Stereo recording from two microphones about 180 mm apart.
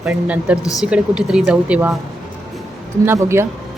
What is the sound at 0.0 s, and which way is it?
A woman's voice, 5° right (ahead or behind).